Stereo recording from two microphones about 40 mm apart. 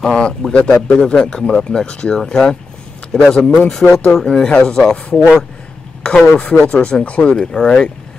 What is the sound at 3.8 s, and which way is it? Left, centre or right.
Speech, left.